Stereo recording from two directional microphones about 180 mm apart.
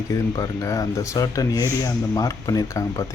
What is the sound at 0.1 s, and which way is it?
Speech, 20° left (ahead or behind).